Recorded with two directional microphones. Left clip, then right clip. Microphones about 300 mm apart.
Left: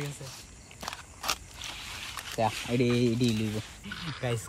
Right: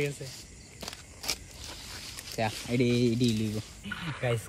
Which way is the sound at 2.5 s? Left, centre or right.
Centre.